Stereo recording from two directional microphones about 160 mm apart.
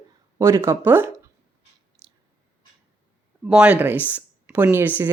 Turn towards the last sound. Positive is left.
turn(degrees=-10)  # may be behind; listen again after turning